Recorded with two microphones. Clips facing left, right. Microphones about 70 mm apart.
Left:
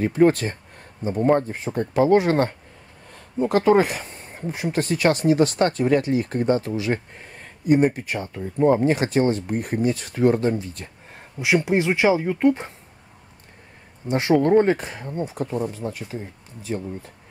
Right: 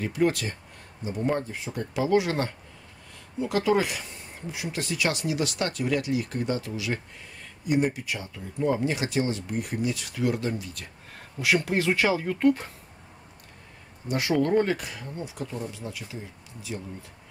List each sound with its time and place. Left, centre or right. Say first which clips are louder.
0.0 s speech: left 8 dB; left
14.0 s speech: left 6 dB; left